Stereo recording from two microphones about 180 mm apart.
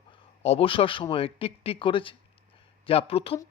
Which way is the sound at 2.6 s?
30° left (ahead or behind).